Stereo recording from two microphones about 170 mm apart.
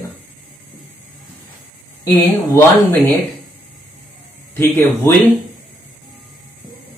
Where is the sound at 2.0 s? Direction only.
20° left (ahead or behind).